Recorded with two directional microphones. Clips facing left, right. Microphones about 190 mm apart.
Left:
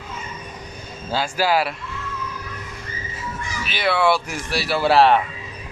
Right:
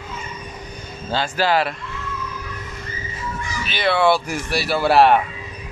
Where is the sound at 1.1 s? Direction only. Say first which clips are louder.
Right 1 dB; 10° left (ahead or behind).